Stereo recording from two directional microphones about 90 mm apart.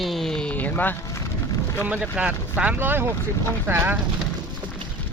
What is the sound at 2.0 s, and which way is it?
Speech, 15° right (ahead or behind).